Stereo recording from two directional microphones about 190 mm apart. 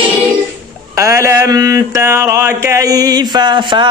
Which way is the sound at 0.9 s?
15° right (ahead or behind).